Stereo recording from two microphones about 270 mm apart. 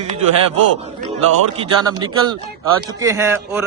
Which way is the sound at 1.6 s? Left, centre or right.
Centre.